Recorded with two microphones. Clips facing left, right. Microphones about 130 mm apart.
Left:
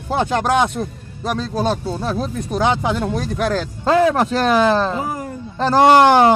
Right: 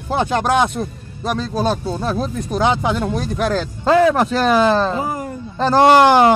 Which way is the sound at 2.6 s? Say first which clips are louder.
Right 1 dB; 15° right (ahead or behind).